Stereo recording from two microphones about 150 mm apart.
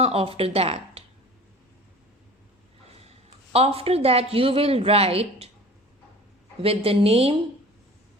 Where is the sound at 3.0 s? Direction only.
40° right (ahead or behind).